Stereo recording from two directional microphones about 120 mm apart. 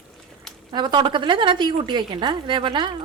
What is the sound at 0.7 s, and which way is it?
Speech, 40° right (ahead or behind).